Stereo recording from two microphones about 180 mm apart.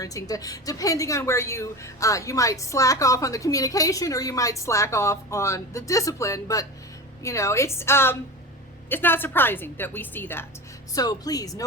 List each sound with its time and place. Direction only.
0.0 s a woman's voice: 20° left (ahead or behind)